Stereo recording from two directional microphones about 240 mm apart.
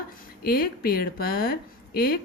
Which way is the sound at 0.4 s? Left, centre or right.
Left.